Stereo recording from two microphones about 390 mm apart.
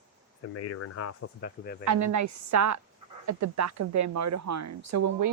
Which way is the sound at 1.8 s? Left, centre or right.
Right.